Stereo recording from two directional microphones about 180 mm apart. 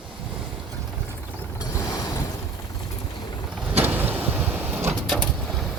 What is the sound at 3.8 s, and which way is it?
Vehicle, 10° right (ahead or behind).